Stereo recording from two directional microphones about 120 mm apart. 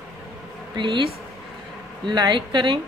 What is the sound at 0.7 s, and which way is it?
Speech, 40° right (ahead or behind).